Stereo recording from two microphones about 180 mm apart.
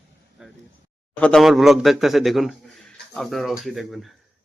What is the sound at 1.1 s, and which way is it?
A man's voice, 5° left (ahead or behind).